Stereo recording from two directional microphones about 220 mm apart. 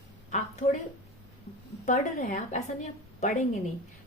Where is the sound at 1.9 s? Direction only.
35° left (ahead or behind).